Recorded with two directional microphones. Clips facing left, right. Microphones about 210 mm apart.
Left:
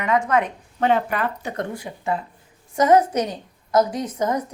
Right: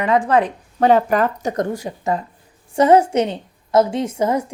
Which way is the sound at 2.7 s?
30° right (ahead or behind).